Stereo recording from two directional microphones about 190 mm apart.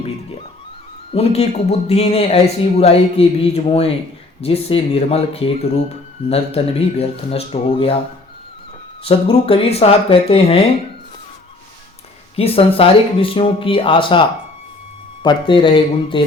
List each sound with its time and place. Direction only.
1.1 s speech: 35° left (ahead or behind)
9.0 s speech: 30° left (ahead or behind)
12.4 s speech: 30° left (ahead or behind)